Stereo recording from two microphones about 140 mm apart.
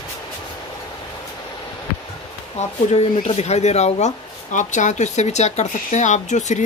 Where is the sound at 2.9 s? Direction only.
50° left (ahead or behind).